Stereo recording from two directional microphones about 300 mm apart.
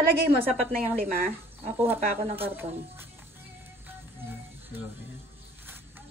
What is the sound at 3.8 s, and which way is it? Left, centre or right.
Music, centre.